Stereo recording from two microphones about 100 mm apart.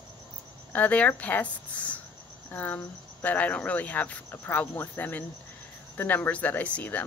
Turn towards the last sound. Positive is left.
turn(degrees=15)  # may be behind; listen again after turning